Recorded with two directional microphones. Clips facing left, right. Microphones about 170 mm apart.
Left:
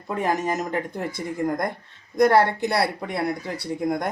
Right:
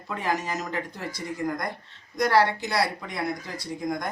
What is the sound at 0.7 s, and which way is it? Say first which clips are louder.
Speech: left 5 dB; 55° left (ahead or behind).